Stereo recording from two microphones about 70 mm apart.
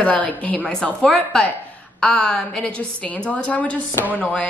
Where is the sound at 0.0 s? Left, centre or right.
Left.